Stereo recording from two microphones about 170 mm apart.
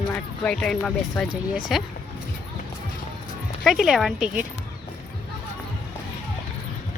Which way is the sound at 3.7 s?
Centre (ahead or behind).